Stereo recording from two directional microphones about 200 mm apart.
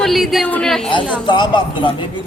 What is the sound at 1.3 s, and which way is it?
Speech, 25° left (ahead or behind).